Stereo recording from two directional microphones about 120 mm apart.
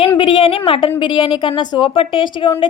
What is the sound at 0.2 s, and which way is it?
A woman's voice, 45° left (ahead or behind).